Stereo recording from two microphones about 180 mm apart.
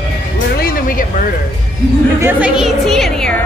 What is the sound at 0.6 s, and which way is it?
Vehicle, 55° left (ahead or behind).